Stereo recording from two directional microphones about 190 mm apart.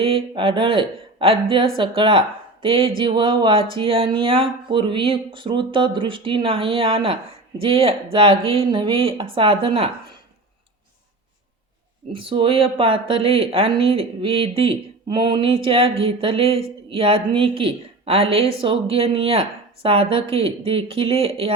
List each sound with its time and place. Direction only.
0.3 s speech: 25° right (ahead or behind)
12.1 s speech: 25° right (ahead or behind)